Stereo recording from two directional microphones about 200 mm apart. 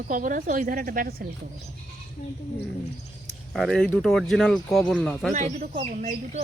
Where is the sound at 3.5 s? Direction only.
Centre (ahead or behind).